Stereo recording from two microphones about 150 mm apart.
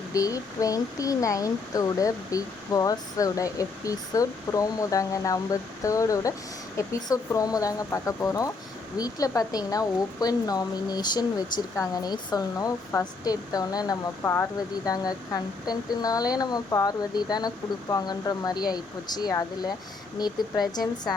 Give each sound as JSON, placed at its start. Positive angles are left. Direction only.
{"t": 0.1, "sound": "speech", "side_deg": 25}